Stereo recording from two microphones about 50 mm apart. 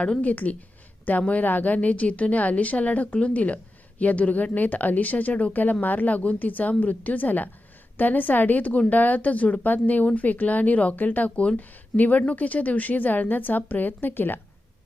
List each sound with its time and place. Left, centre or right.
0.0 s a woman's voice: left